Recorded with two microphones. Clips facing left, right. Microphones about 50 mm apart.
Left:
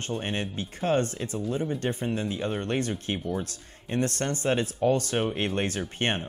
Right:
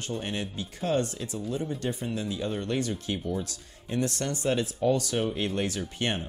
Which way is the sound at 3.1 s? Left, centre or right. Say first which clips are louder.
Left 1 dB; centre.